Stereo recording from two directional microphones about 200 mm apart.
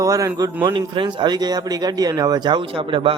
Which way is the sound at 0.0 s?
15° right (ahead or behind).